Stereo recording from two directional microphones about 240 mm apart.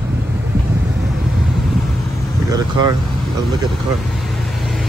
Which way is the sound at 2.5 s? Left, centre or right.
Centre.